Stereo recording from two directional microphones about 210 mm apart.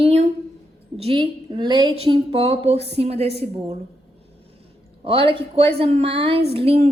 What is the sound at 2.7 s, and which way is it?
Speech, 55° right (ahead or behind).